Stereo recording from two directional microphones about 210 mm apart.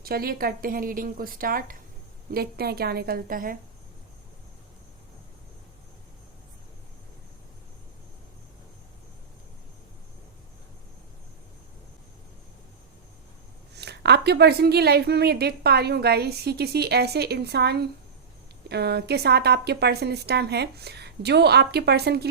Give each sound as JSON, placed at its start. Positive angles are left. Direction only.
{"t": 0.0, "sound": "a woman's voice", "side_deg": -45}
{"t": 13.7, "sound": "a woman's voice", "side_deg": -55}